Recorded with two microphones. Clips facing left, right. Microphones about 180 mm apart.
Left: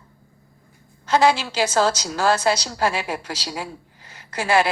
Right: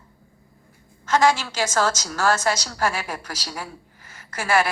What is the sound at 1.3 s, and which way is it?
Speech, 30° left (ahead or behind).